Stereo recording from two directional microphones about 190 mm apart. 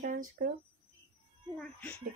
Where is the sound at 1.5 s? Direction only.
5° left (ahead or behind).